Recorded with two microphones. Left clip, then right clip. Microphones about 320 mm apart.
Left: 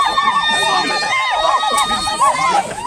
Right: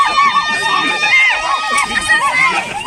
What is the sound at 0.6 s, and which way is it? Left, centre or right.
Run, left.